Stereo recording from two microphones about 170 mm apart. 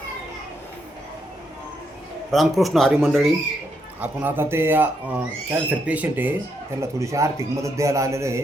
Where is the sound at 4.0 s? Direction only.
10° right (ahead or behind).